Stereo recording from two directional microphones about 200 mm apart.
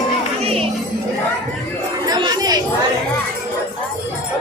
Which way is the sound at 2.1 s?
20° right (ahead or behind).